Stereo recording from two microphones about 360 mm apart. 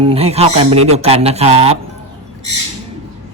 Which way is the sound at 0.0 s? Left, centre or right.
Centre.